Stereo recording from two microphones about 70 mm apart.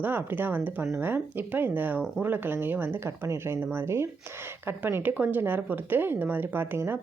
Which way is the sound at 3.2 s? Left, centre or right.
Right.